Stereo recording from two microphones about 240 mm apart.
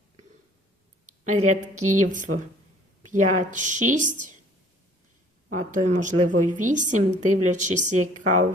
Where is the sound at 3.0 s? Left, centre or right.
Right.